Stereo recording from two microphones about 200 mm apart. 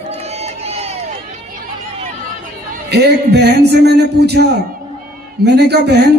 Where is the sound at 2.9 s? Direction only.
55° right (ahead or behind).